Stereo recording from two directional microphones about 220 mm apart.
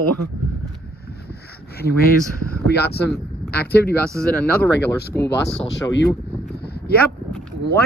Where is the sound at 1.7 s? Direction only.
45° left (ahead or behind).